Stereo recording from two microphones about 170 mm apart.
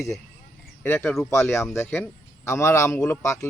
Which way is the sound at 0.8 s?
10° left (ahead or behind).